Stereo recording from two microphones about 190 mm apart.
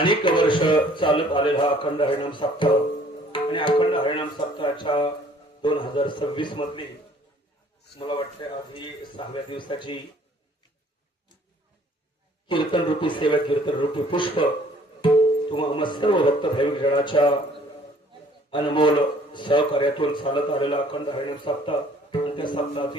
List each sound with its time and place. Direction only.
0.0 s a man's voice: 25° left (ahead or behind)
7.9 s a man's voice: 30° left (ahead or behind)
12.5 s a man's voice: 25° left (ahead or behind)
18.5 s a man's voice: 25° left (ahead or behind)